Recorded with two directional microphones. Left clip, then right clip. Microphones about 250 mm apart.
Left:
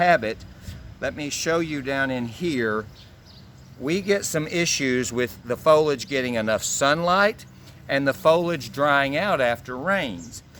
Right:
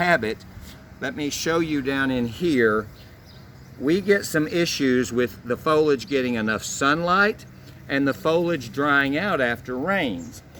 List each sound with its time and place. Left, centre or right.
0.0 s speech: left
3.8 s speech: left